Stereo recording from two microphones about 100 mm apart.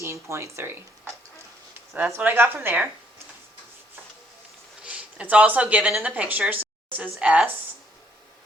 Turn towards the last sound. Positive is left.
turn(degrees=-10)  # may be behind; listen again after turning